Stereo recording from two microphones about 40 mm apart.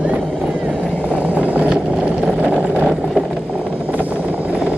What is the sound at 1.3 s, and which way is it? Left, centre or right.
Vehicle, right.